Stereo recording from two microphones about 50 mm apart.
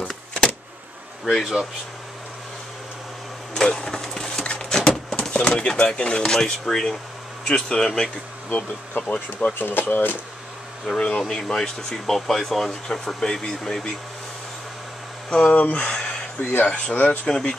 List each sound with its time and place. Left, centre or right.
1.2 s speech: centre
3.5 s a sound: centre
5.2 s speech: centre
9.0 s speech: left
9.6 s speech: left
10.9 s speech: left
11.2 s speech: centre
15.4 s speech: left
16.3 s speech: left
17.3 s speech: centre